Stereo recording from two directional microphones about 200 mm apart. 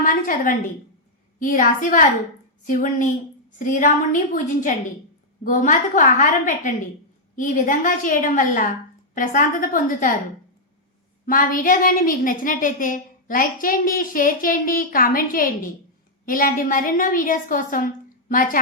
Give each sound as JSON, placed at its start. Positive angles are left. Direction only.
{"t": 0.0, "sound": "a woman's voice", "side_deg": 45}
{"t": 11.3, "sound": "a woman's voice", "side_deg": 45}